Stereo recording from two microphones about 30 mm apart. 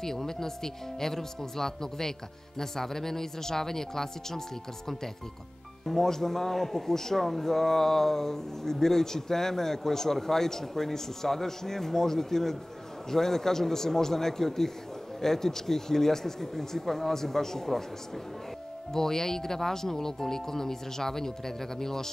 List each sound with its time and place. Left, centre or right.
0.0 s a man's voice: centre
5.9 s a man's voice: centre
18.9 s a man's voice: centre